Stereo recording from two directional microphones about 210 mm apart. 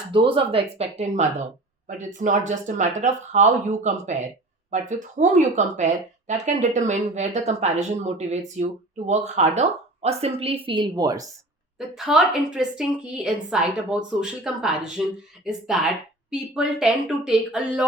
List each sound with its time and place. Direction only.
0.1 s a woman's voice: 25° right (ahead or behind)
11.8 s a woman's voice: centre (ahead or behind)